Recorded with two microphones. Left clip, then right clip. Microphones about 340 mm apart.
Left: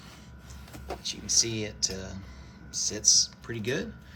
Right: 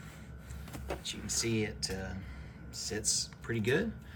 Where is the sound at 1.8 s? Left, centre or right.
Left.